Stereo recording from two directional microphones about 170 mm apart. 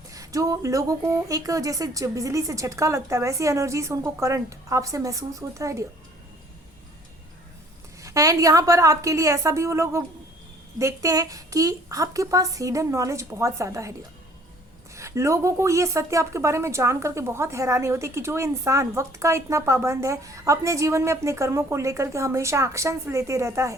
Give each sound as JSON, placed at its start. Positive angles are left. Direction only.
{"t": 0.1, "sound": "speech", "side_deg": -20}
{"t": 8.0, "sound": "speech", "side_deg": -20}
{"t": 14.9, "sound": "speech", "side_deg": -15}